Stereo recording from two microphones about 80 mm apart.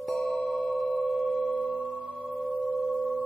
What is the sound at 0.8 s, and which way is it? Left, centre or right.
Singing bowl, centre.